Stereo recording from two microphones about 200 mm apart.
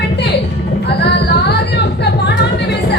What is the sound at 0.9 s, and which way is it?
Music, 55° left (ahead or behind).